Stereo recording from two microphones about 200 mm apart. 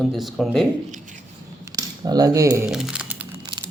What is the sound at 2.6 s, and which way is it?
Crumpling, 5° right (ahead or behind).